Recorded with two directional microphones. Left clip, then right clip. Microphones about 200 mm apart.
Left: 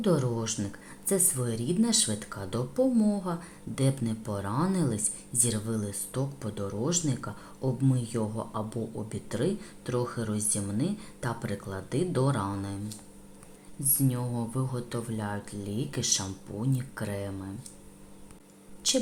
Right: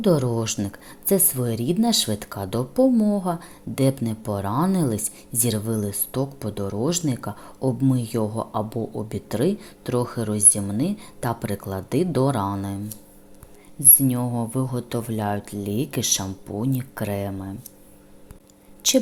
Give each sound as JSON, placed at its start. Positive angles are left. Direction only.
{"t": 0.0, "sound": "speech", "side_deg": -25}
{"t": 18.8, "sound": "speech", "side_deg": -35}